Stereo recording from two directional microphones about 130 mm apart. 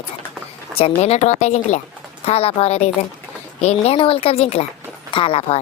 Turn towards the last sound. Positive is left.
turn(degrees=45)  # may be behind; listen again after turning